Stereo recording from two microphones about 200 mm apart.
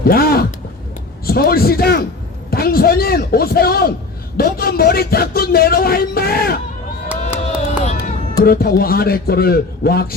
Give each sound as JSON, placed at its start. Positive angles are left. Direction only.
{"t": 0.0, "sound": "speech", "side_deg": 50}
{"t": 7.4, "sound": "run", "side_deg": 35}
{"t": 8.4, "sound": "speech", "side_deg": 50}